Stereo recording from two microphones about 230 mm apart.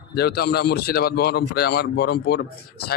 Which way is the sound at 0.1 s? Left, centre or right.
Left.